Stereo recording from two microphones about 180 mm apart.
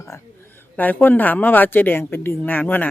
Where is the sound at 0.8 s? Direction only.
10° left (ahead or behind).